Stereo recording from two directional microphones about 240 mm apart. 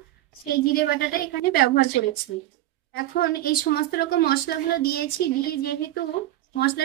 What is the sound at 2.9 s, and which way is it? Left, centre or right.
A woman's voice, left.